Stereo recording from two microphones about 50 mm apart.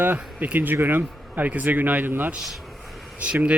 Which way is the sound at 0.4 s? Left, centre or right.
Right.